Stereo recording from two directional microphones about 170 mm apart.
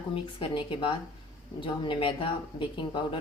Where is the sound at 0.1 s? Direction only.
30° left (ahead or behind).